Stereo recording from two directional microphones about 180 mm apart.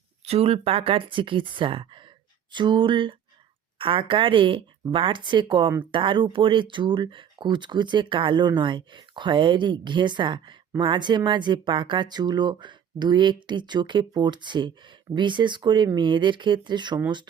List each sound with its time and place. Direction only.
0.3 s speech: 35° right (ahead or behind)